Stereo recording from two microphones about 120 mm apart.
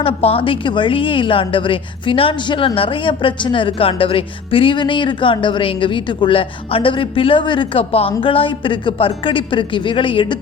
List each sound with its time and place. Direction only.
0.0 s a woman's voice: 55° left (ahead or behind)